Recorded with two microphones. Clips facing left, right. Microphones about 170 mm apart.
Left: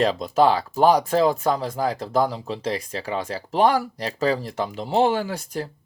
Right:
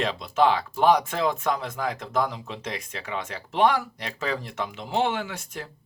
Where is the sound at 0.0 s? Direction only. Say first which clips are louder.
Left 4 dB; 40° left (ahead or behind).